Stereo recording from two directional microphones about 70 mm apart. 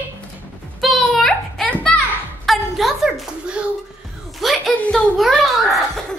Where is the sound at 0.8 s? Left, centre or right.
Centre.